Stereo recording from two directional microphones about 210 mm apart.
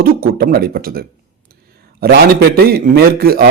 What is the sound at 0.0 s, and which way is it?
Speech, 45° right (ahead or behind).